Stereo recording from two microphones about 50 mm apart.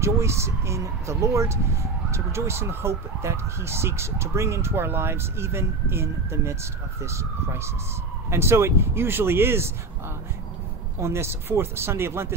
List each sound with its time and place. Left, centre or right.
0.0 s speech: right
11.0 s speech: right